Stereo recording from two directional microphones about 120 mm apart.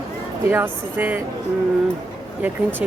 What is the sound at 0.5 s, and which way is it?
Speech, 15° right (ahead or behind).